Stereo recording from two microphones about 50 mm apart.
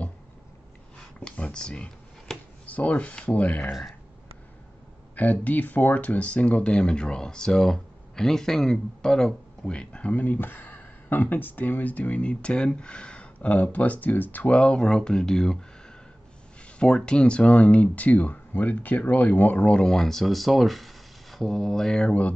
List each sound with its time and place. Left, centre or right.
1.2 s speech: left
2.7 s speech: left
5.1 s speech: left
10.1 s speech: left
14.5 s speech: left
16.7 s speech: centre; by 19.5 s left
19.5 s speech: left